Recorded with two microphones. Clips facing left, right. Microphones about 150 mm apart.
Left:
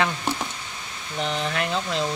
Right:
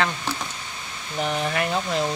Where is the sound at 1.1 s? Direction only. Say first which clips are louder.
Right 2 dB; 10° right (ahead or behind).